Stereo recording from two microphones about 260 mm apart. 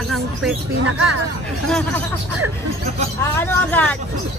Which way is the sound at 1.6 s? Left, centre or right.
Centre.